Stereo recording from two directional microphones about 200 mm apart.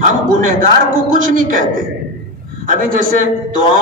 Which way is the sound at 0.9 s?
45° right (ahead or behind).